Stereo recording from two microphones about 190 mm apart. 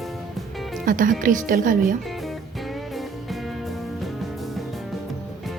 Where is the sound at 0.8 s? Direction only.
45° right (ahead or behind).